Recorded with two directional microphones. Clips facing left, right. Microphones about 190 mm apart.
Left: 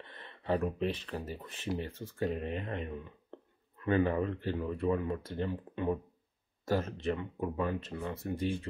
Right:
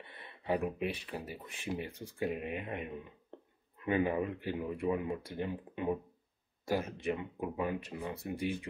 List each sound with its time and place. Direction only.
0.0 s speech: 10° right (ahead or behind)